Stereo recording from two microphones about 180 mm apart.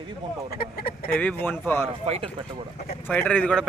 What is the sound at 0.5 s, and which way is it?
Speech, 55° left (ahead or behind).